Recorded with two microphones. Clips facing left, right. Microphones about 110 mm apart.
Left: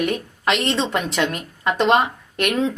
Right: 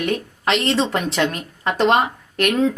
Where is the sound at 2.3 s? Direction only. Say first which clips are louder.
Right 3 dB; 40° right (ahead or behind).